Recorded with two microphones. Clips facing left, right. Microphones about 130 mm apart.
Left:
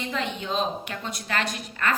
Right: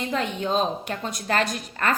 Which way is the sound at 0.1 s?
40° right (ahead or behind).